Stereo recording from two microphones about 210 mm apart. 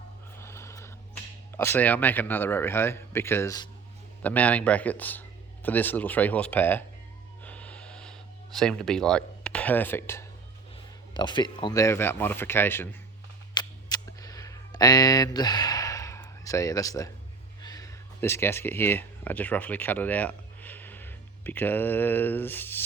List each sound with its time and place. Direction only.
0.3 s a sound: 10° left (ahead or behind)
1.5 s speech: 10° left (ahead or behind)
7.4 s gasp: 5° left (ahead or behind)
11.1 s speech: 20° left (ahead or behind)
13.5 s a sound: 20° left (ahead or behind)
17.6 s speech: 15° left (ahead or behind)